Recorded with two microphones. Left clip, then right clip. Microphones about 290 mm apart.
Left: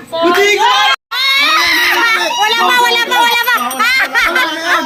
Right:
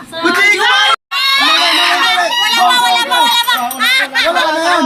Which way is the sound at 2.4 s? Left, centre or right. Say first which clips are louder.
Left 1 dB; centre.